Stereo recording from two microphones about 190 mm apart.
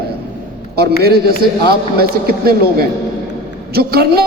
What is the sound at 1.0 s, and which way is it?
A man's voice, 55° right (ahead or behind).